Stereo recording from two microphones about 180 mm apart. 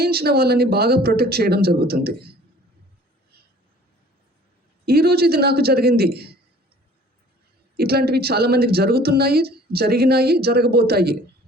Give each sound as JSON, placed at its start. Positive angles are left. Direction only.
{"t": 0.0, "sound": "a woman's voice", "side_deg": -60}
{"t": 4.9, "sound": "a woman's voice", "side_deg": -60}
{"t": 7.8, "sound": "a woman's voice", "side_deg": -60}